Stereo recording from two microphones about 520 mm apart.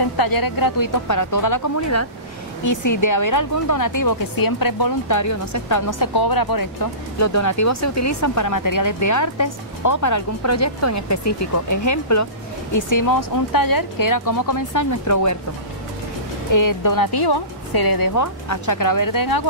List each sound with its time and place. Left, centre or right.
0.2 s speech: left
16.5 s speech: left